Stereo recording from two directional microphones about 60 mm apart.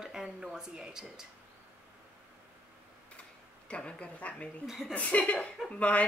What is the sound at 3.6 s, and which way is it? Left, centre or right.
Speech, centre.